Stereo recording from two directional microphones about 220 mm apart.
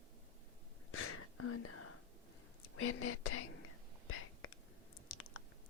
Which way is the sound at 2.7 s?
75° left (ahead or behind).